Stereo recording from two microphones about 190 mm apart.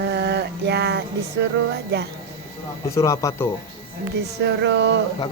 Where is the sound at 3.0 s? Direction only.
15° left (ahead or behind).